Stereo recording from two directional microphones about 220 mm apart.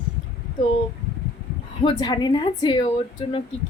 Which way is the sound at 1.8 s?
20° left (ahead or behind).